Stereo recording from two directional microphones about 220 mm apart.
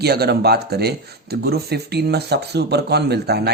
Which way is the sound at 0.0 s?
45° right (ahead or behind).